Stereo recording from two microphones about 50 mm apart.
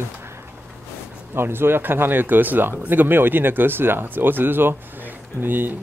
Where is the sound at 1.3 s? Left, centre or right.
Right.